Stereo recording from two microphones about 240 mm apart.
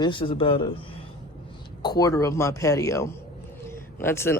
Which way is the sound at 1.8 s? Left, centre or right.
Centre.